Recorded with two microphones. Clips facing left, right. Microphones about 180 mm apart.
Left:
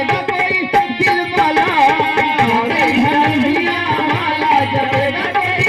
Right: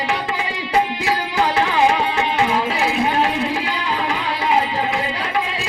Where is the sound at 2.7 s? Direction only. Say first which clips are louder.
Left 5 dB; 70° left (ahead or behind).